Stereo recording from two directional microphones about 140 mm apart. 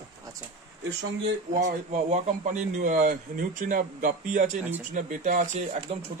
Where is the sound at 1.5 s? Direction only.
65° right (ahead or behind).